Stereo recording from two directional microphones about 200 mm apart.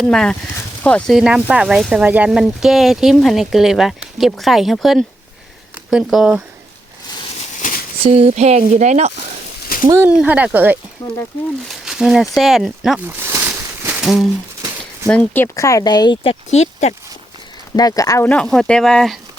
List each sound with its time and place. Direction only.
0.0 s speech: 5° left (ahead or behind)
8.0 s speech: 30° right (ahead or behind)
9.8 s speech: 10° right (ahead or behind)
11.9 s a sound: centre (ahead or behind)
15.1 s speech: 10° left (ahead or behind); by 16.9 s 35° left (ahead or behind)
17.7 s speech: 20° left (ahead or behind); by 19.2 s centre (ahead or behind)